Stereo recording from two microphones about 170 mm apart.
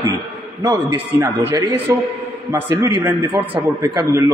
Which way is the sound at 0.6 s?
20° right (ahead or behind).